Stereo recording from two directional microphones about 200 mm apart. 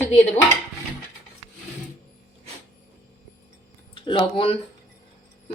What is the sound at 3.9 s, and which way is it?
Speech, 25° left (ahead or behind).